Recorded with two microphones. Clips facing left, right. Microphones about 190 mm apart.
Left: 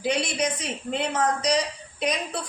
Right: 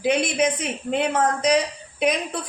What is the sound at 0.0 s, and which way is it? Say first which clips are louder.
Speech: right 5 dB; 55° right (ahead or behind).